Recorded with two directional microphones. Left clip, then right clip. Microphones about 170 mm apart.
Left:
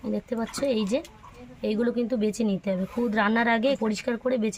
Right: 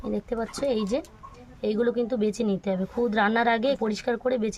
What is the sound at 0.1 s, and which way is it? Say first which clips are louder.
Speech: right 1 dB; 45° right (ahead or behind).